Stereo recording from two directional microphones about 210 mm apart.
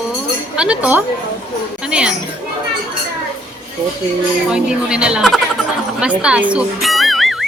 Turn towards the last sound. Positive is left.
turn(degrees=0)  # may be behind; listen again after turning